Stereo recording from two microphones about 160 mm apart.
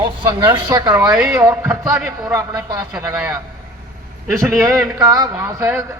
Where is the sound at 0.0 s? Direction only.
30° right (ahead or behind).